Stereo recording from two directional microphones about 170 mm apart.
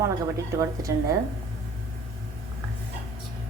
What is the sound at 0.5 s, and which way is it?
Speech, 20° right (ahead or behind).